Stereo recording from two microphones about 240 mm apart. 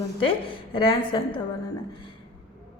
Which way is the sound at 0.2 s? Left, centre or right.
Left.